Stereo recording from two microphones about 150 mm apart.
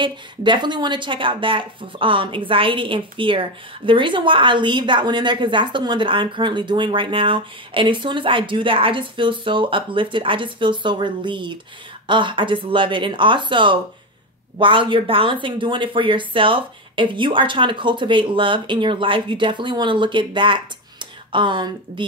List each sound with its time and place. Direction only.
0.0 s speech: 30° right (ahead or behind)